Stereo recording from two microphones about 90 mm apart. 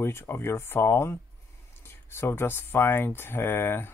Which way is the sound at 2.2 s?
25° left (ahead or behind).